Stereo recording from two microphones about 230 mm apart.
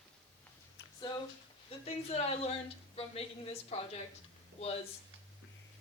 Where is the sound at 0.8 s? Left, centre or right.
Left.